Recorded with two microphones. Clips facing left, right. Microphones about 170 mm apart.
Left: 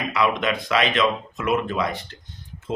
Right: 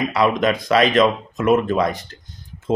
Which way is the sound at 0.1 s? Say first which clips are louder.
Right 2 dB; 40° right (ahead or behind).